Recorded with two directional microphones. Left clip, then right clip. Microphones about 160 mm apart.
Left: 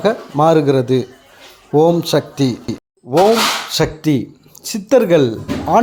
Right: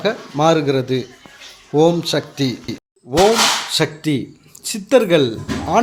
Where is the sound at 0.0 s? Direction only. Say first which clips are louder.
Left 3 dB; 35° left (ahead or behind).